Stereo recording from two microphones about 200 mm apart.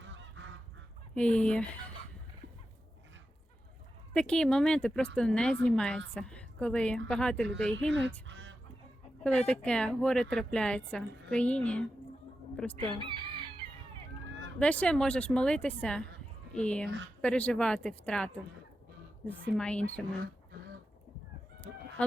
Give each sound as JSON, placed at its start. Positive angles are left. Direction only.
{"t": 0.0, "sound": "goose", "side_deg": -65}
{"t": 1.1, "sound": "speech", "side_deg": 5}
{"t": 4.1, "sound": "a woman's voice", "side_deg": 5}
{"t": 9.2, "sound": "speech", "side_deg": 5}
{"t": 12.7, "sound": "chicken", "side_deg": -25}
{"t": 14.6, "sound": "speech", "side_deg": 5}
{"t": 19.5, "sound": "speech", "side_deg": 5}